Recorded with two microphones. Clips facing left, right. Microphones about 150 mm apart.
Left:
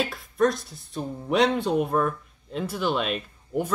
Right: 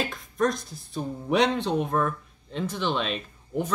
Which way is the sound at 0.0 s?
Centre (ahead or behind).